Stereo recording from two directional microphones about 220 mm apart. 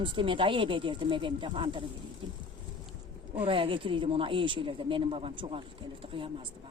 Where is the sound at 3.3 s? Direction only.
25° right (ahead or behind).